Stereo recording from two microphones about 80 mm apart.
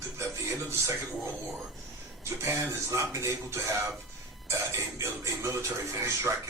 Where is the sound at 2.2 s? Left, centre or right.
Right.